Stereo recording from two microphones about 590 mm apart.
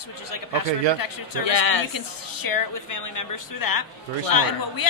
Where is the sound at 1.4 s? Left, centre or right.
Left.